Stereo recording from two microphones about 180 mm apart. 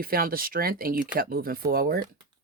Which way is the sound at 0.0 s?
55° right (ahead or behind).